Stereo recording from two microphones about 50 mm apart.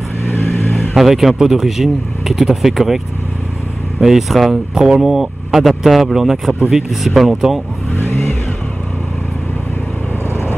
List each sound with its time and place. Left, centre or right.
0.2 s vehicle: left
0.7 s speech: centre
4.0 s speech: centre
7.9 s vehicle: left